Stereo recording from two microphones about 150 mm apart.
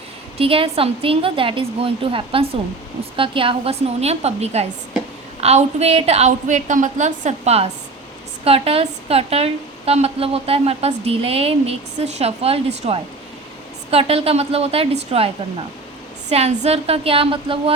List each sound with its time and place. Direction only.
0.3 s a woman's voice: 40° right (ahead or behind)
16.3 s a woman's voice: 45° right (ahead or behind)